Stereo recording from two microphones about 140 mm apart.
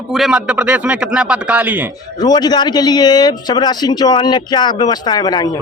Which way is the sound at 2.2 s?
30° left (ahead or behind).